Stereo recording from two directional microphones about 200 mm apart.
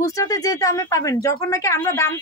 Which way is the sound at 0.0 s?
15° left (ahead or behind).